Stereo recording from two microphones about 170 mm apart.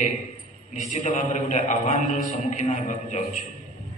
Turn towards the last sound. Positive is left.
turn(degrees=45)  # may be behind; listen again after turning